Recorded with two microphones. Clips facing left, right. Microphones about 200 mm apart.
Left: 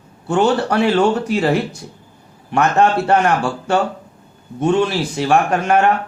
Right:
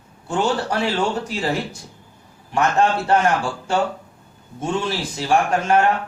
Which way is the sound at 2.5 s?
65° left (ahead or behind).